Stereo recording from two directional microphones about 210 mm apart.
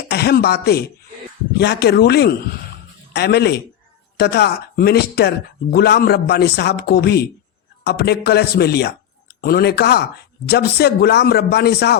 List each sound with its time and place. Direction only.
0.1 s speech: 50° left (ahead or behind)